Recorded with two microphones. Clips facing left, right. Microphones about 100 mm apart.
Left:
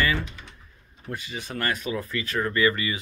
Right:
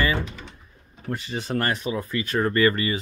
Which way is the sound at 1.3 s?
30° right (ahead or behind).